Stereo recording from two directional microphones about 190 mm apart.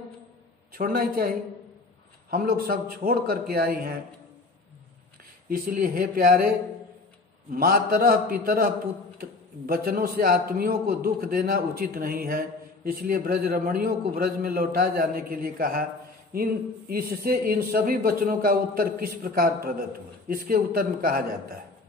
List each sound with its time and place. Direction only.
0.7 s a man's voice: 50° right (ahead or behind)
2.3 s a man's voice: 50° right (ahead or behind)
5.5 s a man's voice: 50° right (ahead or behind)
7.5 s a man's voice: 50° right (ahead or behind)
16.9 s a man's voice: 50° right (ahead or behind)